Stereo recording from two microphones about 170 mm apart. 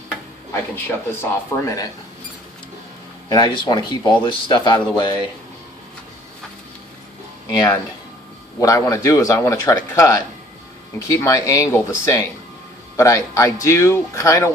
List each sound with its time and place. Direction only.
1.2 s speech: 15° left (ahead or behind)
3.2 s speech: 30° left (ahead or behind)
7.5 s speech: 25° left (ahead or behind)